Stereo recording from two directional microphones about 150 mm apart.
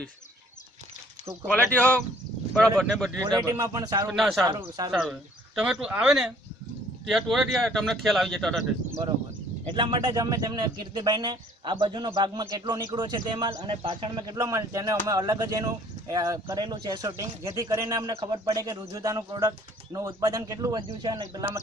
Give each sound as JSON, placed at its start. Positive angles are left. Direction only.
{"t": 1.5, "sound": "speech", "side_deg": 10}
{"t": 3.3, "sound": "a man's voice", "side_deg": -30}
{"t": 4.1, "sound": "speech", "side_deg": 0}
{"t": 4.5, "sound": "a man's voice", "side_deg": -25}
{"t": 5.6, "sound": "speech", "side_deg": -5}
{"t": 9.7, "sound": "a man's voice", "side_deg": -30}